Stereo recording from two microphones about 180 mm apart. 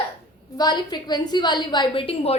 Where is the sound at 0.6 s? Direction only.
25° left (ahead or behind).